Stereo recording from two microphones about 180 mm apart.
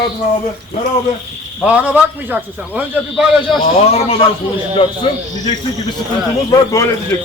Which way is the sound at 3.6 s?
35° left (ahead or behind).